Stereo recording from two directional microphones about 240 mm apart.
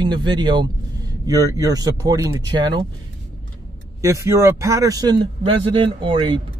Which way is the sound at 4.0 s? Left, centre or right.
Centre.